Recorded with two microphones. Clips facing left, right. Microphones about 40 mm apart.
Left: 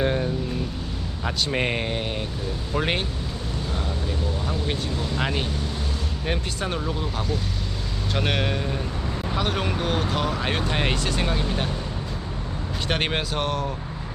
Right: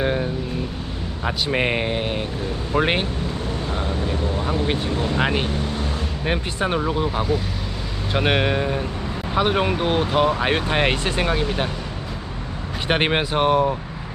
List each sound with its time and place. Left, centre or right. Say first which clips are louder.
0.0 s vehicle: right 1 dB; centre
1.2 s speech: right 3 dB; centre
12.9 s speech: right 6 dB; right